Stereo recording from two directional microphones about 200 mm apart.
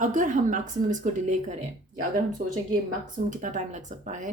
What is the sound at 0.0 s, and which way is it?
Speech, 40° right (ahead or behind).